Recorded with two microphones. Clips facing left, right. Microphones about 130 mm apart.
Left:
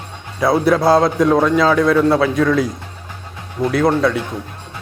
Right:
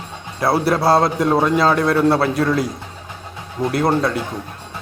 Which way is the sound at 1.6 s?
5° right (ahead or behind).